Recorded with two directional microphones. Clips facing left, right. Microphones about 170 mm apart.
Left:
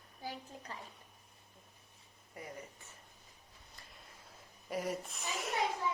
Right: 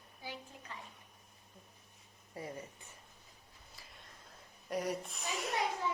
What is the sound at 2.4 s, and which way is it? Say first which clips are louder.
Speech: right 4 dB; 30° right (ahead or behind).